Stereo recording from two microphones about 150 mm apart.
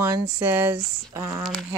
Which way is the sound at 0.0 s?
15° right (ahead or behind).